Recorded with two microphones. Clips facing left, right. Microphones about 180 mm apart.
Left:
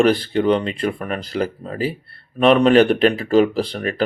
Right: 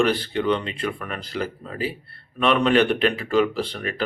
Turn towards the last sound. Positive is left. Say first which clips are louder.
# left 5 dB
turn(degrees=40)  # may be behind; listen again after turning